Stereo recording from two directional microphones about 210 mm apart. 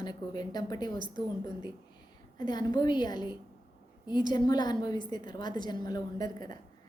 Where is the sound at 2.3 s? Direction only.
20° left (ahead or behind).